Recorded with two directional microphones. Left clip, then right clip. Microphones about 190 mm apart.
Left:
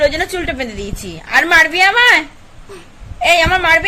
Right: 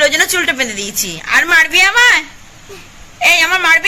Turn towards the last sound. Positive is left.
turn(degrees=10)  # may be behind; listen again after turning